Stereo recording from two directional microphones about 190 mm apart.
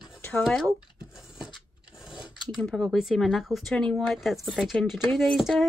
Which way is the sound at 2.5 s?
Centre (ahead or behind).